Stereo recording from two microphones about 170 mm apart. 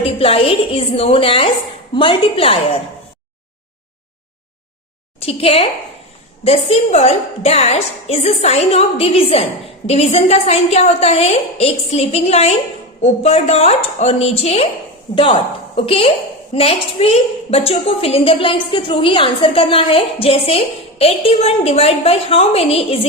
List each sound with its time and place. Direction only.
0.2 s a woman's voice: 35° left (ahead or behind)
5.2 s a woman's voice: 35° left (ahead or behind)